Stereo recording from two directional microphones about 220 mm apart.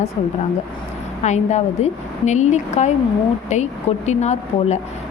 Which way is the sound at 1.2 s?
30° left (ahead or behind).